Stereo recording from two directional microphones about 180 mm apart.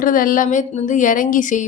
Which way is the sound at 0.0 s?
50° left (ahead or behind).